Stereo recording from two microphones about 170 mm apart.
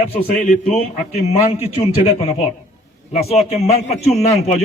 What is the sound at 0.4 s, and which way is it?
A man's voice, 40° left (ahead or behind).